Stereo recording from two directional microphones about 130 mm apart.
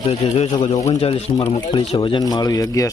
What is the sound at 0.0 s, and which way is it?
Speech, 55° left (ahead or behind).